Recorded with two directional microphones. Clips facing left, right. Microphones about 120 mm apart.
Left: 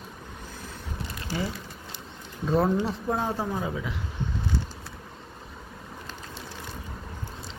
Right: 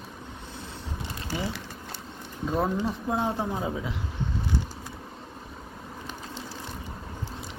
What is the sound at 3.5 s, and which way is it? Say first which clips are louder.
Speech: even; 25° right (ahead or behind).